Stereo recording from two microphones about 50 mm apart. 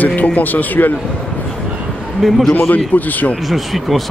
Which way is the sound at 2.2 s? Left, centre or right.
Centre.